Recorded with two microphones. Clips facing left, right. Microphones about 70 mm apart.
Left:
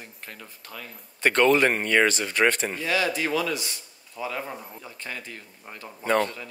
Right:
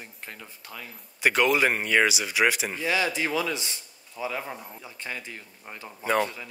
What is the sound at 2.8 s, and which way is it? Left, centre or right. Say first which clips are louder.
Speech: right 1 dB; right.